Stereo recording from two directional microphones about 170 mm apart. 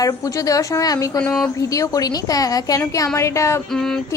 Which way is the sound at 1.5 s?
20° left (ahead or behind).